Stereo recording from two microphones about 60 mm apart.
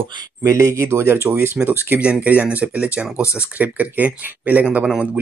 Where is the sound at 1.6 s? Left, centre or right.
Right.